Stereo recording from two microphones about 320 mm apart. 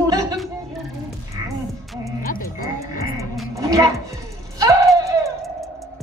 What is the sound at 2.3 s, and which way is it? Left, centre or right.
Frog, left.